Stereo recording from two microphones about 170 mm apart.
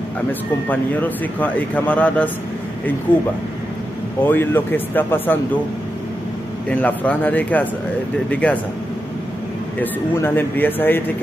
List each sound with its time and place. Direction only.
0.3 s speech: 10° left (ahead or behind)
4.3 s speech: 10° left (ahead or behind)
6.7 s speech: 10° left (ahead or behind)
9.8 s speech: 10° left (ahead or behind)